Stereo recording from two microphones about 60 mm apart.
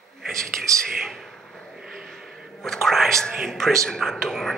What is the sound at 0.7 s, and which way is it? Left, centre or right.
Speech, right.